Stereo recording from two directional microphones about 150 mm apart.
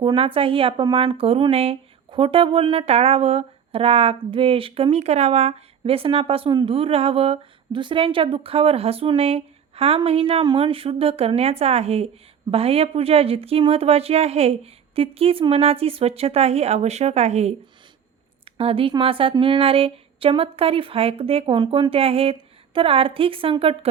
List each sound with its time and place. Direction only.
0.0 s speech: 35° right (ahead or behind)